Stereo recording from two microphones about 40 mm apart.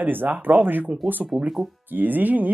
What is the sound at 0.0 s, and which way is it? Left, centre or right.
Speech, right.